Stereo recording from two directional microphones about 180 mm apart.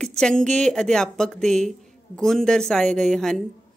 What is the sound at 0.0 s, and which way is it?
A man's voice, 5° left (ahead or behind).